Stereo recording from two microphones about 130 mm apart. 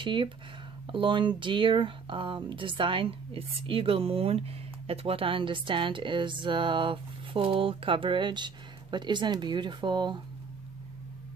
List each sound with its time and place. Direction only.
0.0 s speech: 40° right (ahead or behind)